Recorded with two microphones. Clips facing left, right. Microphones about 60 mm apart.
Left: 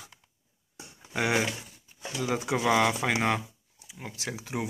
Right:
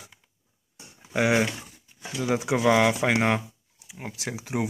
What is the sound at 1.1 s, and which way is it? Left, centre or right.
Speech, right.